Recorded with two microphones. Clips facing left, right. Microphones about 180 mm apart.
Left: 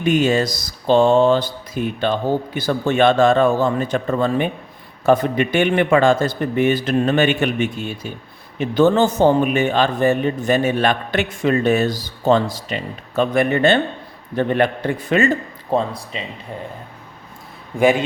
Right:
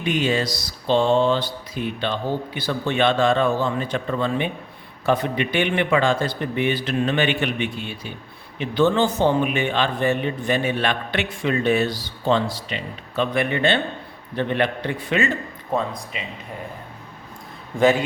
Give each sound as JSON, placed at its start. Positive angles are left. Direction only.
{"t": 0.0, "sound": "a man's voice", "side_deg": 45}
{"t": 17.7, "sound": "a man's voice", "side_deg": 15}